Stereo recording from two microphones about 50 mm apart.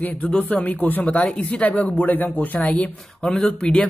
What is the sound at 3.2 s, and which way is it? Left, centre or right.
Speech, centre.